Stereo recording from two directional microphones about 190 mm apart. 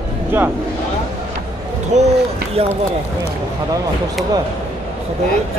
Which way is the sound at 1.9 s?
40° right (ahead or behind).